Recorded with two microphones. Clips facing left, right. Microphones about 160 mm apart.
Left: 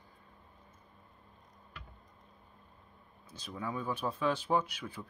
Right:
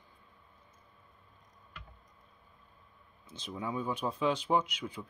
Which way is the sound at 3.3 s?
20° right (ahead or behind).